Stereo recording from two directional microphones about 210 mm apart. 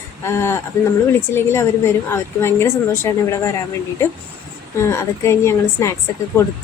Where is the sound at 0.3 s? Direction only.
10° left (ahead or behind).